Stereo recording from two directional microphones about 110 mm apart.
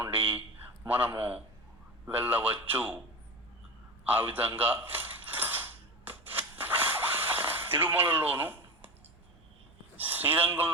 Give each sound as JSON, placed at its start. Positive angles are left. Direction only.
{"t": 0.0, "sound": "a man's voice", "side_deg": -20}
{"t": 4.0, "sound": "mechanisms", "side_deg": -20}
{"t": 10.0, "sound": "speech", "side_deg": -15}